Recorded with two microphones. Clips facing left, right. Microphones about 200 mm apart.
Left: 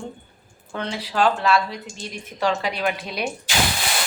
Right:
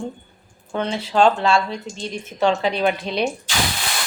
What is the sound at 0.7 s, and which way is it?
Dishes, 25° right (ahead or behind).